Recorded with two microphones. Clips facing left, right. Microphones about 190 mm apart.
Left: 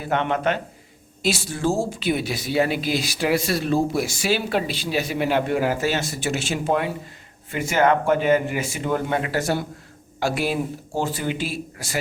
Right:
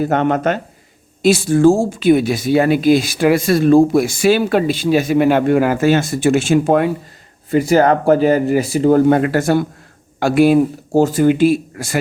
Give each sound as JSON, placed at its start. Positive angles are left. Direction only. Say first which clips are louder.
{"t": 0.0, "sound": "speech", "louder": "right 7 dB", "side_deg": -45}
{"t": 7.5, "sound": "speech", "louder": "right 7 dB", "side_deg": -35}